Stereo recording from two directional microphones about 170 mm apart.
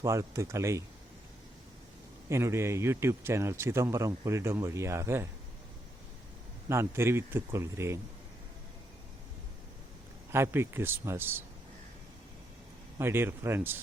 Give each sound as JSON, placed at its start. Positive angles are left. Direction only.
{"t": 0.0, "sound": "a man's voice", "side_deg": -15}
{"t": 2.3, "sound": "a man's voice", "side_deg": -15}
{"t": 6.7, "sound": "a man's voice", "side_deg": -15}
{"t": 10.3, "sound": "a man's voice", "side_deg": -15}
{"t": 13.0, "sound": "a man's voice", "side_deg": -15}